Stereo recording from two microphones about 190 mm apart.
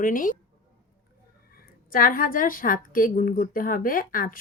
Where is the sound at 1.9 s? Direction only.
50° left (ahead or behind).